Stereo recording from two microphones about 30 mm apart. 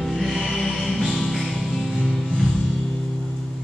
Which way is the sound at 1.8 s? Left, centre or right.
Right.